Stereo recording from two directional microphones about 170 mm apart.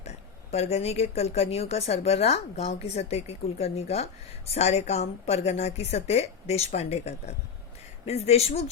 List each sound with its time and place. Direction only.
0.5 s a woman's voice: 40° left (ahead or behind)